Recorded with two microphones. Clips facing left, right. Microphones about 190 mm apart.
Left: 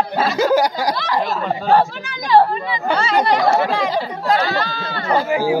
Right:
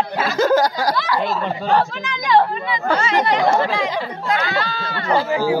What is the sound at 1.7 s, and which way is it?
Speech, 40° left (ahead or behind).